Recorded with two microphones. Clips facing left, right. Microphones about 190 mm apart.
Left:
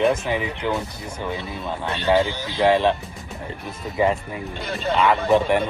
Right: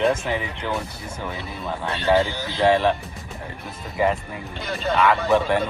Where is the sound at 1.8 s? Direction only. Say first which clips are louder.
Even; 15° left (ahead or behind).